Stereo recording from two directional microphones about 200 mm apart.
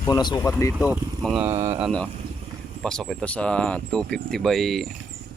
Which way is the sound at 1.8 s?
5° left (ahead or behind).